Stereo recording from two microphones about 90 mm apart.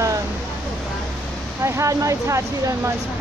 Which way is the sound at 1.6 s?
35° right (ahead or behind).